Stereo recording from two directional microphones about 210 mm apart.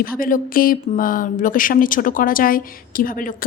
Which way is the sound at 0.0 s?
40° left (ahead or behind).